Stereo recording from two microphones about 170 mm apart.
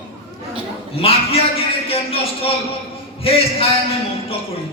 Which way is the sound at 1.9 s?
35° left (ahead or behind).